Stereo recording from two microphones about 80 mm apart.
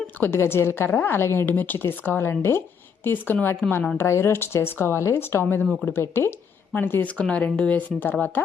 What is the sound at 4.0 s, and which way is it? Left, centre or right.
Speech, left.